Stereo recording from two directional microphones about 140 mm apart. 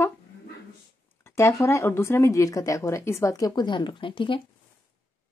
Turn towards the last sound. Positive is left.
turn(degrees=35)  # may be behind; listen again after turning